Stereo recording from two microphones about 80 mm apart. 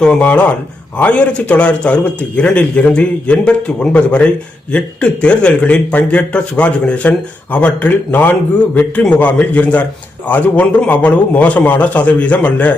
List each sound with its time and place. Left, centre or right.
0.0 s a man's voice: centre